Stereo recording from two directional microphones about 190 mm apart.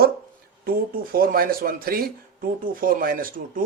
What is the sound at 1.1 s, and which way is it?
Speech, 50° right (ahead or behind).